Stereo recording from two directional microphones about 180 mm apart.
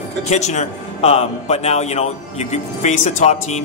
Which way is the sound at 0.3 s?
40° left (ahead or behind).